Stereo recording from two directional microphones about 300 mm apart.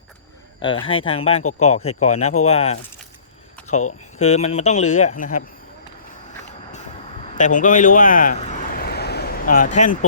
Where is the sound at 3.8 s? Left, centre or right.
Left.